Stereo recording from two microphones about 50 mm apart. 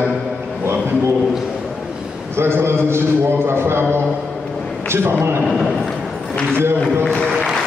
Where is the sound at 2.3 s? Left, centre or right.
Right.